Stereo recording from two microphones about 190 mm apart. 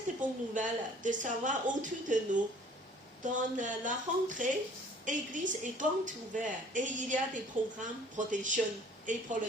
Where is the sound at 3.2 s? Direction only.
40° right (ahead or behind).